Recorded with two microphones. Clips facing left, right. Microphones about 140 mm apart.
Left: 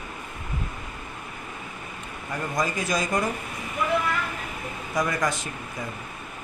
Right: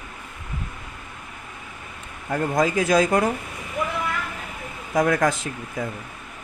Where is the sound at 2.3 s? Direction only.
55° right (ahead or behind).